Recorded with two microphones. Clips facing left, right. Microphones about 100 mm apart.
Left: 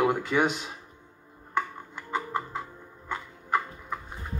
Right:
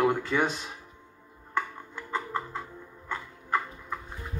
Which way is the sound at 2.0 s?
15° left (ahead or behind).